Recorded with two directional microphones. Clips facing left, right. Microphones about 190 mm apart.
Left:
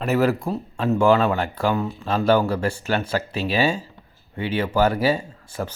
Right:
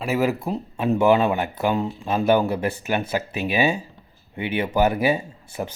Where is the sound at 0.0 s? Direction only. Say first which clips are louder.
Left 2 dB; 10° right (ahead or behind).